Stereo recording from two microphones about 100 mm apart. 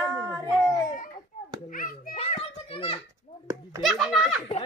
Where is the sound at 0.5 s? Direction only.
40° left (ahead or behind).